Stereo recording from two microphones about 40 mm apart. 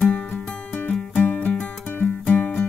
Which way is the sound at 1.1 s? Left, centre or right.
Left.